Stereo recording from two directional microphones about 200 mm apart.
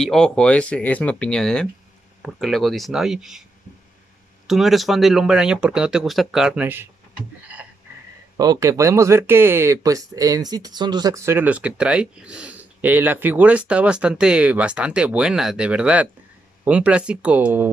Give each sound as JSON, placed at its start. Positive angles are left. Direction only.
{"t": 0.0, "sound": "speech", "side_deg": 0}
{"t": 4.5, "sound": "speech", "side_deg": 0}
{"t": 7.5, "sound": "a sound", "side_deg": -10}
{"t": 8.4, "sound": "speech", "side_deg": -15}